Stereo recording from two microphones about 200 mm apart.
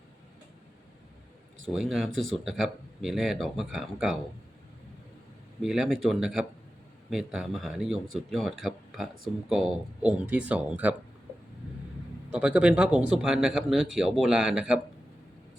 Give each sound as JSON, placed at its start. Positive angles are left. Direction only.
{"t": 1.6, "sound": "speech", "side_deg": 0}
{"t": 5.6, "sound": "speech", "side_deg": 0}
{"t": 12.3, "sound": "speech", "side_deg": -5}